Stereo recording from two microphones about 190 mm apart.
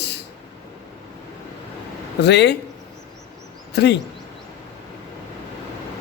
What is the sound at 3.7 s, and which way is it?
Speech, 60° left (ahead or behind).